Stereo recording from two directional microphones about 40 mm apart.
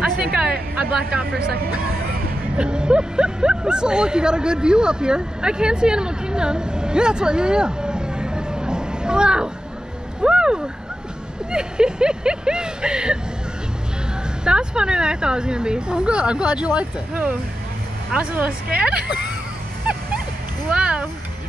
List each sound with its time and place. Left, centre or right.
0.0 s a sound: right
2.5 s speech: right
10.2 s vehicle: right
11.5 s speech: right
14.4 s speech: right
20.7 s a sound: right